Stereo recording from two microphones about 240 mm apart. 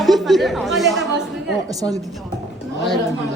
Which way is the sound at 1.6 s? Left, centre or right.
Centre.